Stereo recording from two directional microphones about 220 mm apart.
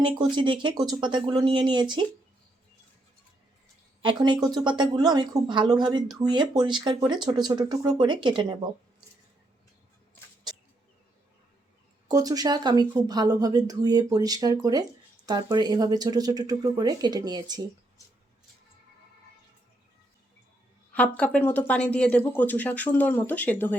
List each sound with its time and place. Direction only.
0.3 s speech: 20° right (ahead or behind)
4.0 s speech: 20° right (ahead or behind)
12.0 s speech: 15° right (ahead or behind)
20.9 s speech: 5° left (ahead or behind)